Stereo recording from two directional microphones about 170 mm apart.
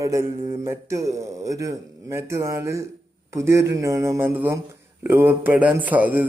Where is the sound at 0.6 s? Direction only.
20° right (ahead or behind).